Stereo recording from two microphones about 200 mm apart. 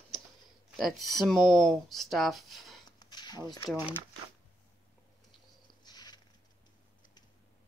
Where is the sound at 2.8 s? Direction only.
20° left (ahead or behind).